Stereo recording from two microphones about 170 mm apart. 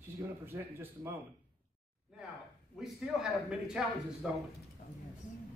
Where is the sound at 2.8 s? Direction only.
5° right (ahead or behind).